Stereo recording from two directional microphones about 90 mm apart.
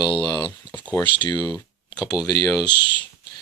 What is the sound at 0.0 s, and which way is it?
Speech, 55° left (ahead or behind).